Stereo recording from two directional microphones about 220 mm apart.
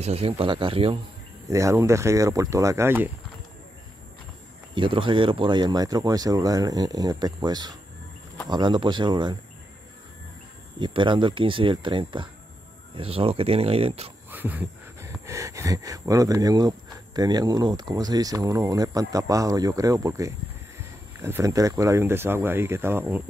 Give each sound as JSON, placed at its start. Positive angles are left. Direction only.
{"t": 0.0, "sound": "speech", "side_deg": -25}
{"t": 1.5, "sound": "speech", "side_deg": -15}
{"t": 4.7, "sound": "speech", "side_deg": -20}
{"t": 10.8, "sound": "speech", "side_deg": -20}
{"t": 14.3, "sound": "speech", "side_deg": -10}